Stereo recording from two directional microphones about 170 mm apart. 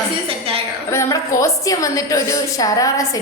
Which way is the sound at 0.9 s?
15° left (ahead or behind).